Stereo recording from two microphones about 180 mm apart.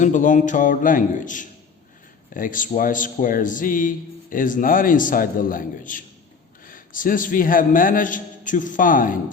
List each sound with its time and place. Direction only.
0.0 s speech: 45° left (ahead or behind)